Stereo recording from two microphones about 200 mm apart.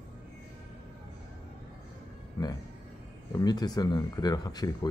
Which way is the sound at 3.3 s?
20° left (ahead or behind).